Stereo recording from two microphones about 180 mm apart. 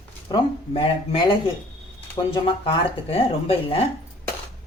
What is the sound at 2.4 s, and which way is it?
Speech, 30° left (ahead or behind).